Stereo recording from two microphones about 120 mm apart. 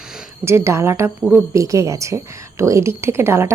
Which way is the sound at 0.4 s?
20° right (ahead or behind).